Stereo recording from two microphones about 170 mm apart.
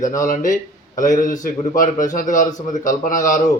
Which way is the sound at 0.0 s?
50° left (ahead or behind).